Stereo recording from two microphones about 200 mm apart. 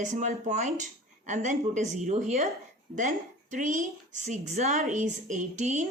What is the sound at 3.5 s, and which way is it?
A woman's voice, 40° right (ahead or behind).